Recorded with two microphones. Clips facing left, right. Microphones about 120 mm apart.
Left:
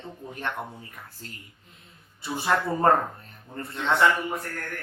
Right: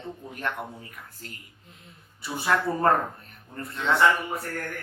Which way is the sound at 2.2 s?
25° left (ahead or behind).